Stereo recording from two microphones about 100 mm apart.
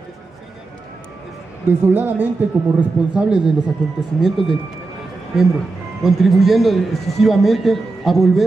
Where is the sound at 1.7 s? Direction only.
20° right (ahead or behind).